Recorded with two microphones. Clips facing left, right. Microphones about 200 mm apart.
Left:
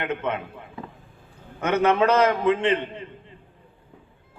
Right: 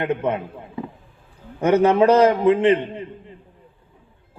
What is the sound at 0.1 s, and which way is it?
Speech, 15° right (ahead or behind).